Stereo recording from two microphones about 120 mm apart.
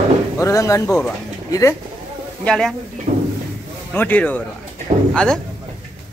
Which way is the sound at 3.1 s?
60° right (ahead or behind).